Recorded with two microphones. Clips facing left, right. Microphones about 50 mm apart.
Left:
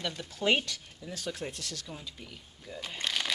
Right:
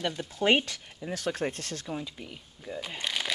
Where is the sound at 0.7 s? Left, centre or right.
Right.